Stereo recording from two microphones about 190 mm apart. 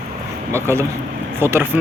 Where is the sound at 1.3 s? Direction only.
10° right (ahead or behind).